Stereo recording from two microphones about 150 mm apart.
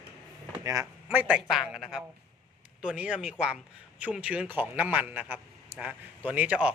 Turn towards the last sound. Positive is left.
turn(degrees=-10)  # may be behind; listen again after turning